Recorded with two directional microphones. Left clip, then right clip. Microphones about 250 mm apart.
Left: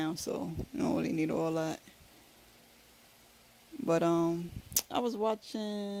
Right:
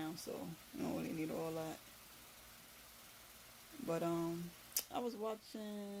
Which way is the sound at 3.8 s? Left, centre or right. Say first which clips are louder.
Left 11 dB; left.